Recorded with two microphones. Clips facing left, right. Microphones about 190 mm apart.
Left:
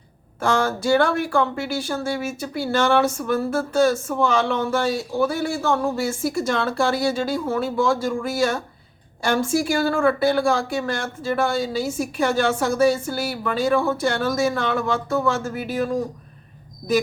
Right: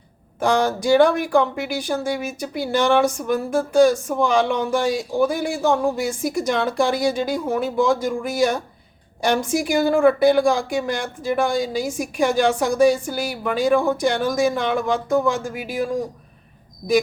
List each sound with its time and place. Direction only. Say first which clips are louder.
0.3 s speech: right 2 dB; 15° right (ahead or behind)